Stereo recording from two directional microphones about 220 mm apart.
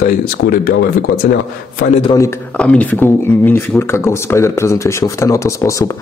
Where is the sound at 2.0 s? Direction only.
15° left (ahead or behind).